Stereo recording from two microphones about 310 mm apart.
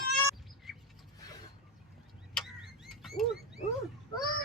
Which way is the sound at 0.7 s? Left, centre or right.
Centre.